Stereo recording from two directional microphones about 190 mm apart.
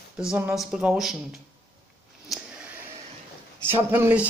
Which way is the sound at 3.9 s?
10° right (ahead or behind).